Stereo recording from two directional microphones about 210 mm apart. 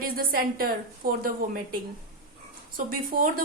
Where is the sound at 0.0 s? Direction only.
45° right (ahead or behind).